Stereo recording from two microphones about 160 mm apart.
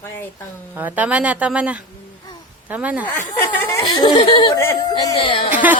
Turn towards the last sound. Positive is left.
turn(degrees=-10)  # may be behind; listen again after turning